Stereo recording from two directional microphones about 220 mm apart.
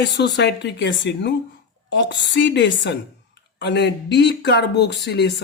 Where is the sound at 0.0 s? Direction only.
50° left (ahead or behind).